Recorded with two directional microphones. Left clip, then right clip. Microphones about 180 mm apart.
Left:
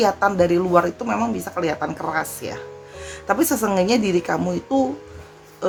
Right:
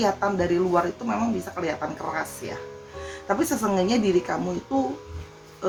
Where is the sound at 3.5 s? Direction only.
55° left (ahead or behind).